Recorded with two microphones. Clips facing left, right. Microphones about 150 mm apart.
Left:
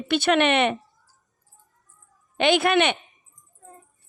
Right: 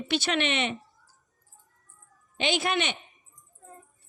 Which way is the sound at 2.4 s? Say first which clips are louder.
Left 8 dB; 60° left (ahead or behind).